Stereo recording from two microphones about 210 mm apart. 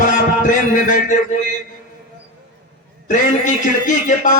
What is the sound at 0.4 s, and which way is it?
Speech, 40° left (ahead or behind).